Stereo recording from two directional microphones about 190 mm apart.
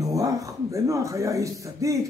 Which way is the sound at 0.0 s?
20° right (ahead or behind).